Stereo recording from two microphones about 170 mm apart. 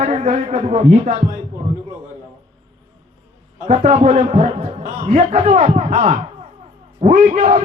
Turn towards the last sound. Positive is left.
turn(degrees=-45)  # may be behind; listen again after turning